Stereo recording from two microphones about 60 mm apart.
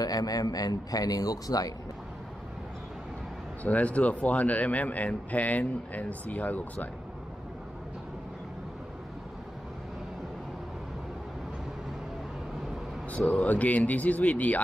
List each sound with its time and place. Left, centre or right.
0.0 s a man's voice: left
3.6 s a man's voice: left
13.3 s a man's voice: left